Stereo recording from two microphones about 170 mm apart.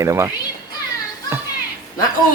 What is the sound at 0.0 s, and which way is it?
Speech, 15° right (ahead or behind).